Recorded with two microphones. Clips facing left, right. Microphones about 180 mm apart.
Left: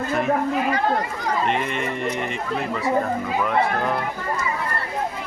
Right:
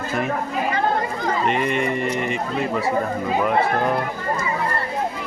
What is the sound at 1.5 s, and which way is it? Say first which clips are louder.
Speech: right 3 dB; 5° right (ahead or behind).